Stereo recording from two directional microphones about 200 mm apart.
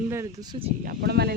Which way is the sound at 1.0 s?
55° right (ahead or behind).